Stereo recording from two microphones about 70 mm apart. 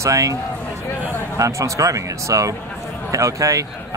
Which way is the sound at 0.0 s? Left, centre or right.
Right.